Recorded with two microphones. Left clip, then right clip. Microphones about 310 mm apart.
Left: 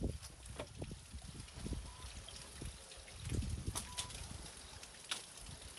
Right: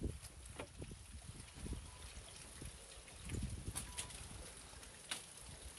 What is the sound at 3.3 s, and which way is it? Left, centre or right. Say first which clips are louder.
Boat: left 4 dB; centre.